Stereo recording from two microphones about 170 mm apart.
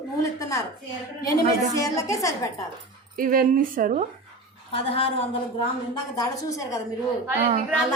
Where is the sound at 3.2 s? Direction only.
55° right (ahead or behind).